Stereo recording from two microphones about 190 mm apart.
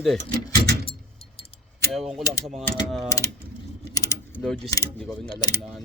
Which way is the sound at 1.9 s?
Centre (ahead or behind).